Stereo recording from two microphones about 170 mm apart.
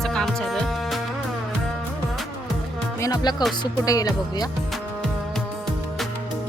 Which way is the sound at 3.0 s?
20° left (ahead or behind).